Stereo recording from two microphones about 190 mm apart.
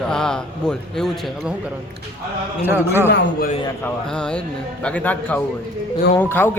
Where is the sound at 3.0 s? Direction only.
65° left (ahead or behind).